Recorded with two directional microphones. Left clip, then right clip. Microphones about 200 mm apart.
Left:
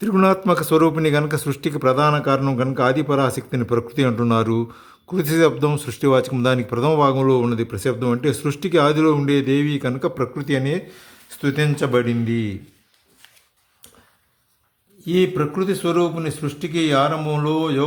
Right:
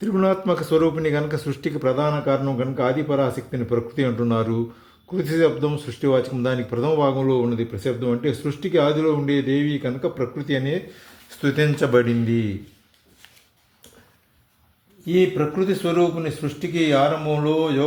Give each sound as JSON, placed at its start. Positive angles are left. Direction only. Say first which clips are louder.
{"t": 0.0, "sound": "speech", "louder": "left 3 dB", "side_deg": 25}
{"t": 15.0, "sound": "speech", "louder": "even", "side_deg": 20}